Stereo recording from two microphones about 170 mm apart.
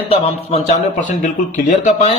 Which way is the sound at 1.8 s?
45° left (ahead or behind).